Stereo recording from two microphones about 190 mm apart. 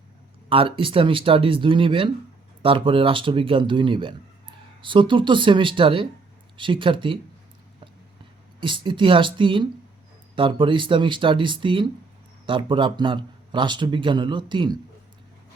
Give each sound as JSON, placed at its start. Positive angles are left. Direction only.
{"t": 0.5, "sound": "speech", "side_deg": -30}
{"t": 8.6, "sound": "speech", "side_deg": -25}